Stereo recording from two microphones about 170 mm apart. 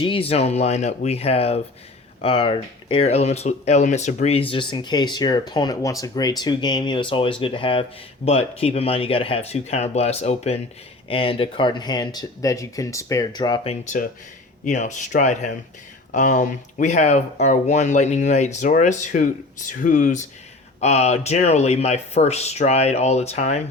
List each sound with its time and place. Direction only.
0.0 s speech: 30° left (ahead or behind)
13.7 s speech: 45° left (ahead or behind)